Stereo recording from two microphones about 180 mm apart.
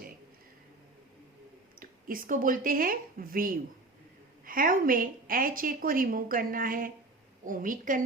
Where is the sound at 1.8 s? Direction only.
50° right (ahead or behind).